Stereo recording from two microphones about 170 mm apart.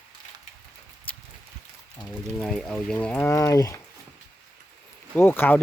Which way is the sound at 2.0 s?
5° left (ahead or behind).